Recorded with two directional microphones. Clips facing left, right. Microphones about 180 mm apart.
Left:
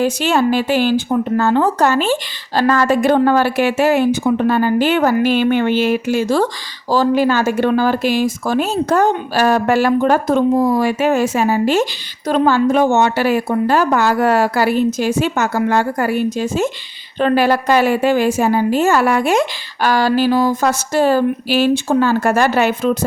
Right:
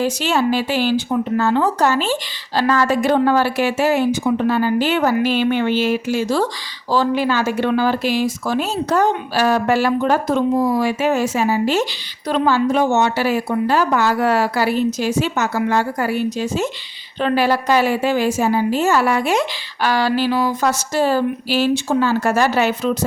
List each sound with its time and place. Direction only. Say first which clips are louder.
0.0 s a woman's voice: left 3 dB; 55° left (ahead or behind)